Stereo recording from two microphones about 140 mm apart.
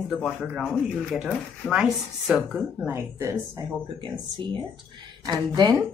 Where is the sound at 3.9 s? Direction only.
35° right (ahead or behind).